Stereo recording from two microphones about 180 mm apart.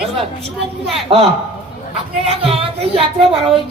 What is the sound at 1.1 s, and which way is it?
A man's voice, 30° right (ahead or behind).